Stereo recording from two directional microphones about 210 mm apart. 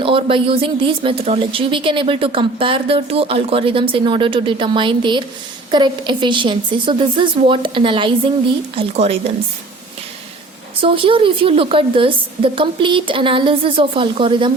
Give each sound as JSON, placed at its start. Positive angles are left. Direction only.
{"t": 0.0, "sound": "a woman's voice", "side_deg": -25}
{"t": 10.8, "sound": "a woman's voice", "side_deg": -25}